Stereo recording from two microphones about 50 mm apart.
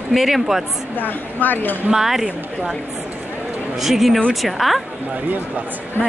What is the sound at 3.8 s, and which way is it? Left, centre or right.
A woman's voice, centre.